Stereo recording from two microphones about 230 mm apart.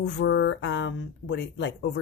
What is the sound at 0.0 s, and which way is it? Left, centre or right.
A woman's voice, left.